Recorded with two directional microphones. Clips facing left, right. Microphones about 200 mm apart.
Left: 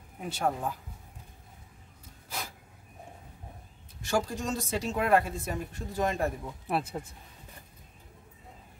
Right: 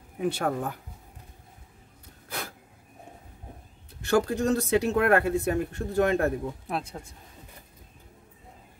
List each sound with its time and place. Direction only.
0.2 s speech: 65° right (ahead or behind)
2.2 s a sound: 60° right (ahead or behind)
4.0 s speech: 60° right (ahead or behind)
6.7 s speech: 5° left (ahead or behind)